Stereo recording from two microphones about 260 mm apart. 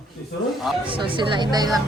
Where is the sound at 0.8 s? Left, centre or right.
Centre.